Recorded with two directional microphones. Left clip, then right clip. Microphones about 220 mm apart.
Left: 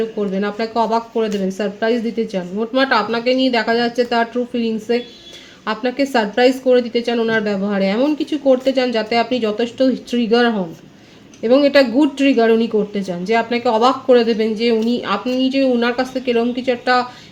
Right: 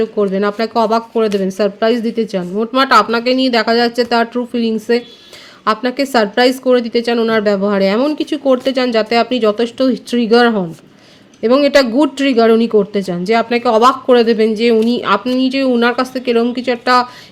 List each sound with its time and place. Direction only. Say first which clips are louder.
0.0 s speech: right 6 dB; 50° right (ahead or behind)